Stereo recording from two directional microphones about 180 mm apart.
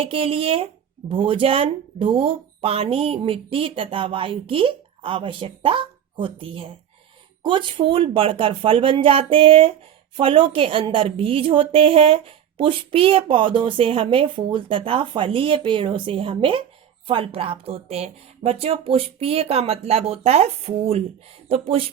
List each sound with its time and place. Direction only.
0.0 s a woman's voice: 30° right (ahead or behind)